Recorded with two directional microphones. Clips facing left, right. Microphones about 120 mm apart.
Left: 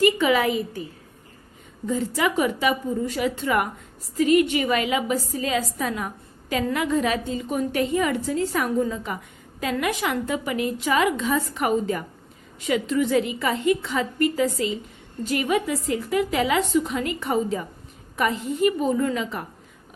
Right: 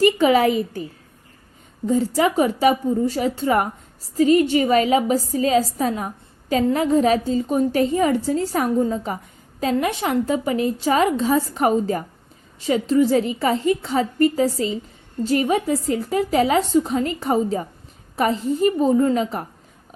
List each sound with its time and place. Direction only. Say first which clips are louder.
0.0 s a woman's voice: right 4 dB; 40° right (ahead or behind)
1.9 s a woman's voice: right 5 dB; 35° right (ahead or behind)